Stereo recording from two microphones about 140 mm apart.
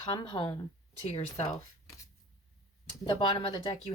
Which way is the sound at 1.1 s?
50° left (ahead or behind).